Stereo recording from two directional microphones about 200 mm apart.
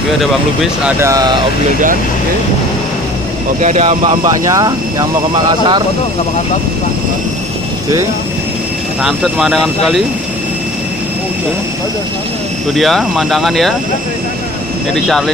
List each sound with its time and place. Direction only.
0.2 s speech: centre (ahead or behind)
0.9 s speech: 15° right (ahead or behind)
3.6 s speech: 30° right (ahead or behind)
9.0 s speech: centre (ahead or behind)
12.7 s speech: centre (ahead or behind)
15.0 s speech: centre (ahead or behind)